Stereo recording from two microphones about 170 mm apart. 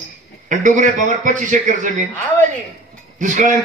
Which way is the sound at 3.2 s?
50° right (ahead or behind).